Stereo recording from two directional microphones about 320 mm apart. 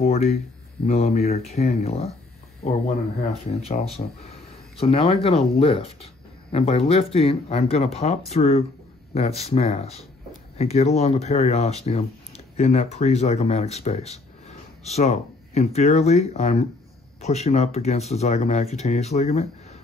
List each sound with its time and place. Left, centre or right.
0.0 s speech: centre
3.6 s speech: centre